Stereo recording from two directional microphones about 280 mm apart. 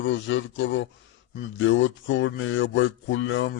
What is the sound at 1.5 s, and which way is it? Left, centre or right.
Speech, left.